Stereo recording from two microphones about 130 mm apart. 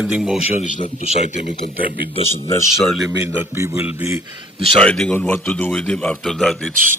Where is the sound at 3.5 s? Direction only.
20° right (ahead or behind).